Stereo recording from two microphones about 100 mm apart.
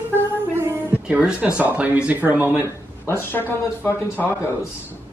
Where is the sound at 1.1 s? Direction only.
10° right (ahead or behind).